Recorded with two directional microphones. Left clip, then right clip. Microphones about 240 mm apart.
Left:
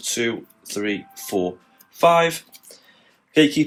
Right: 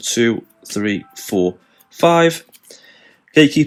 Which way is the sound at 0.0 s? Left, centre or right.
Right.